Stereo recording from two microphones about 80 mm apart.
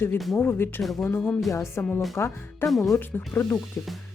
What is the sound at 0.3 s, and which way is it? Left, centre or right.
Speech, left.